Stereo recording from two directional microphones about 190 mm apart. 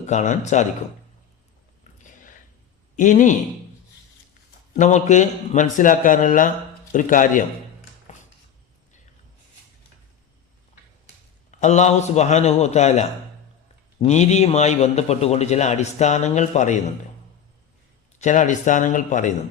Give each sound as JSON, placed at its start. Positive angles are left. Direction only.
{"t": 0.0, "sound": "a man's voice", "side_deg": 40}
{"t": 2.9, "sound": "a man's voice", "side_deg": 40}
{"t": 4.8, "sound": "a man's voice", "side_deg": 40}
{"t": 8.1, "sound": "a sound", "side_deg": 40}
{"t": 11.6, "sound": "a man's voice", "side_deg": 35}
{"t": 18.2, "sound": "a man's voice", "side_deg": 40}